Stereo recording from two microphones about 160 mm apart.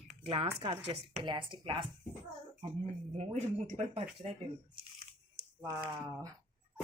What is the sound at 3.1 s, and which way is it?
Speech, 45° right (ahead or behind).